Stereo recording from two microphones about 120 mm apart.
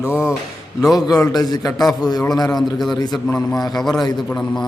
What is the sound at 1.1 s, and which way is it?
A man's voice, 30° left (ahead or behind).